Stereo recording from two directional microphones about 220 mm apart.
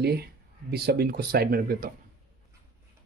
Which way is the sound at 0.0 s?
45° right (ahead or behind).